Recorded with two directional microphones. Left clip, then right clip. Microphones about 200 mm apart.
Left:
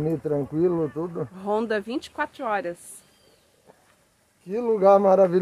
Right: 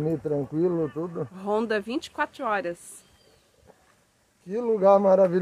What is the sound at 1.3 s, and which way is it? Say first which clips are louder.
Speech: left 1 dB; centre (ahead or behind).